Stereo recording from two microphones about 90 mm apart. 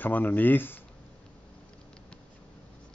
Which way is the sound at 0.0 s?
20° left (ahead or behind).